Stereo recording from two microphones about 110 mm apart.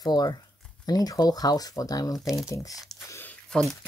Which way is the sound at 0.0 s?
35° left (ahead or behind).